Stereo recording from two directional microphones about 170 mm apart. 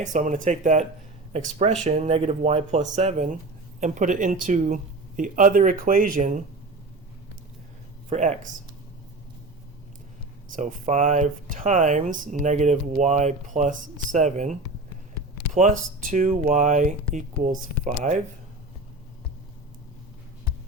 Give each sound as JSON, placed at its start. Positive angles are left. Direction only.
{"t": 0.0, "sound": "speech", "side_deg": -45}
{"t": 8.1, "sound": "speech", "side_deg": -45}
{"t": 10.5, "sound": "speech", "side_deg": -45}